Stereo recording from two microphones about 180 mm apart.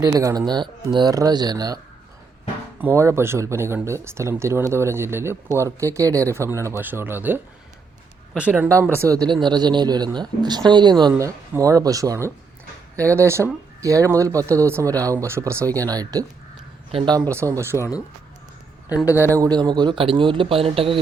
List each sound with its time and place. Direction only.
0.0 s speech: 20° right (ahead or behind)
2.8 s speech: 15° right (ahead or behind)
16.9 s a man's voice: 30° right (ahead or behind)
17.3 s speech: 15° right (ahead or behind)
17.7 s speech: 15° left (ahead or behind)
19.3 s speech: 20° right (ahead or behind)